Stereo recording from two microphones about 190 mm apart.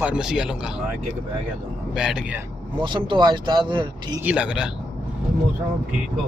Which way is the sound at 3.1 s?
25° right (ahead or behind).